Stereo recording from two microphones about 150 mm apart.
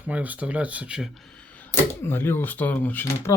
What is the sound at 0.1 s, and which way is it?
Speech, 10° right (ahead or behind).